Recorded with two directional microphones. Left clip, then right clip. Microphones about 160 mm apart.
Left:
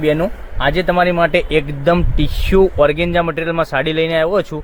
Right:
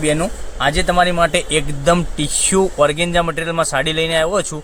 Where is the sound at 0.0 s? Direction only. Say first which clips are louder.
Left 2 dB; 50° left (ahead or behind).